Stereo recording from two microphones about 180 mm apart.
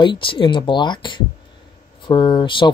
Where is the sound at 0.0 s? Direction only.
25° left (ahead or behind).